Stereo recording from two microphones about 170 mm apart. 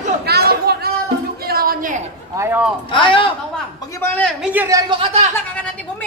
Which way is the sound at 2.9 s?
30° left (ahead or behind).